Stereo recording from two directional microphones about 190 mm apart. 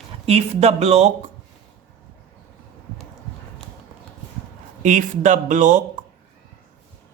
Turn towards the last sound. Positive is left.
turn(degrees=-40)  # may be behind; listen again after turning